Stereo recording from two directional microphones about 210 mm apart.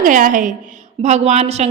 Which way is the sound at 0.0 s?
40° right (ahead or behind).